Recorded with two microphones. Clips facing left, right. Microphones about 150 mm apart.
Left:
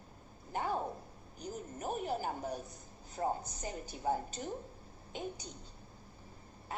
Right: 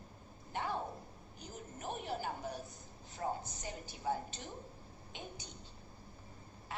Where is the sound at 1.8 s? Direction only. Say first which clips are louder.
Left 4 dB; 40° left (ahead or behind).